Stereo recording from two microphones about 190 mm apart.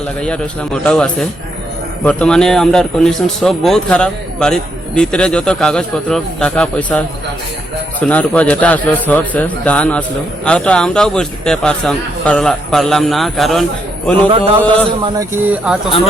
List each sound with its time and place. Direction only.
0.2 s speech: 5° left (ahead or behind)
8.0 s speech: 5° left (ahead or behind)
14.3 s a sound: 30° right (ahead or behind)
15.4 s speech: 5° right (ahead or behind)